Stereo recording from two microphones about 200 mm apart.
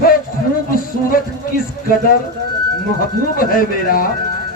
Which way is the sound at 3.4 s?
45° left (ahead or behind).